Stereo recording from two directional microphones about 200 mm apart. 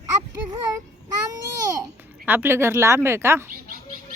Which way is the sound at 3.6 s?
40° right (ahead or behind).